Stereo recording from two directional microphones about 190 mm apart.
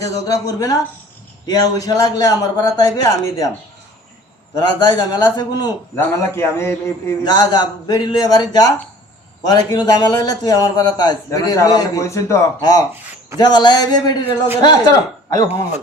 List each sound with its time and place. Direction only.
0.0 s a man's voice: 20° left (ahead or behind)
4.5 s a man's voice: 20° left (ahead or behind)